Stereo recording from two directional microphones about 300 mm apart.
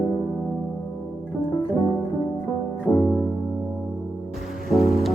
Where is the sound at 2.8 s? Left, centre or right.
Centre.